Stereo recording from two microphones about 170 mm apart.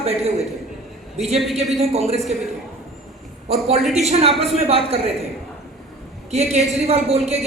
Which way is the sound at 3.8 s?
Centre (ahead or behind).